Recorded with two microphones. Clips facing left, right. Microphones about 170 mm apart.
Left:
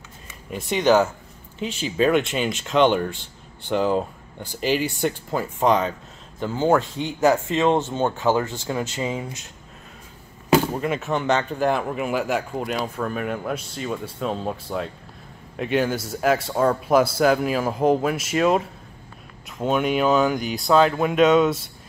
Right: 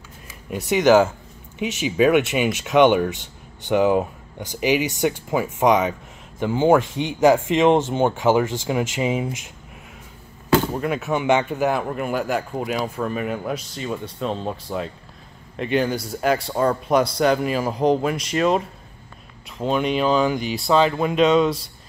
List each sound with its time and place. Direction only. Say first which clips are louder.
0.7 s speech: right 3 dB; 15° right (ahead or behind)
10.8 s speech: right 1 dB; centre (ahead or behind)